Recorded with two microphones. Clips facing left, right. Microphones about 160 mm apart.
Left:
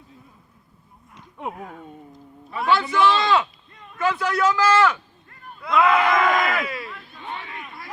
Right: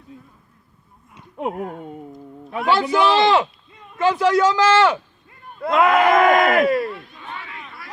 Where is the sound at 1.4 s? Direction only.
65° right (ahead or behind).